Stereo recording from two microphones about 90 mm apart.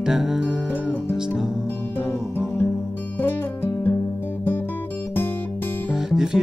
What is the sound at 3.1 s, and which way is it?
Music, 20° left (ahead or behind).